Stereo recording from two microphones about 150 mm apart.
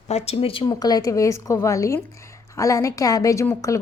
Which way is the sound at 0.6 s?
25° left (ahead or behind).